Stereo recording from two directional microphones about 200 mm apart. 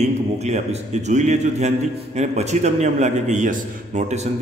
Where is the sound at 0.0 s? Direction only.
35° right (ahead or behind).